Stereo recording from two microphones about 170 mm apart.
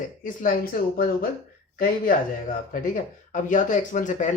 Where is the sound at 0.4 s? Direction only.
60° left (ahead or behind).